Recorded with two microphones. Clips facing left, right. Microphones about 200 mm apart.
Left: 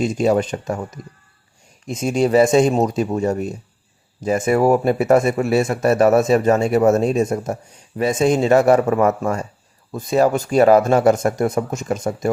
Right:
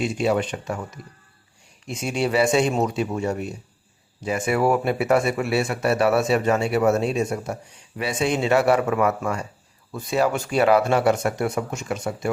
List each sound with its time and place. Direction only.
0.0 s speech: 40° left (ahead or behind)